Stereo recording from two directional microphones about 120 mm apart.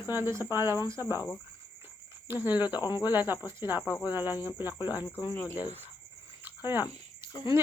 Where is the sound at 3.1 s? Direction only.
15° right (ahead or behind).